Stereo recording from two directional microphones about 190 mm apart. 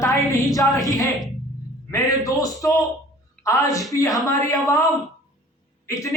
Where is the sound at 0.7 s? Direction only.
20° left (ahead or behind).